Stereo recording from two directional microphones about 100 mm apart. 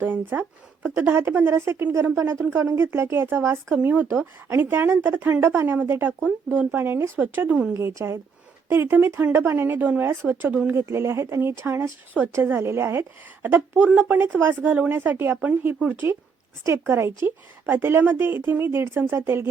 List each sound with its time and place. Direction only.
0.0 s a woman's voice: 20° right (ahead or behind)
7.7 s a woman's voice: 30° right (ahead or behind)